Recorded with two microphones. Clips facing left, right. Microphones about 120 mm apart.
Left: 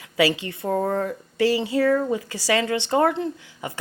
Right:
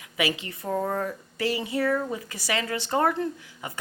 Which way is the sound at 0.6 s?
35° left (ahead or behind).